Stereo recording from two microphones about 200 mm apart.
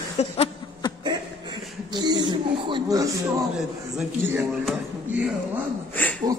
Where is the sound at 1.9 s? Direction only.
20° right (ahead or behind).